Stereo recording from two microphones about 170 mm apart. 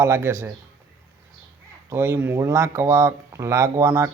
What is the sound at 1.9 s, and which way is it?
Speech, 15° right (ahead or behind).